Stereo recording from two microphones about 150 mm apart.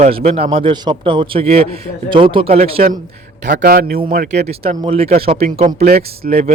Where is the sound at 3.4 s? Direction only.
75° right (ahead or behind).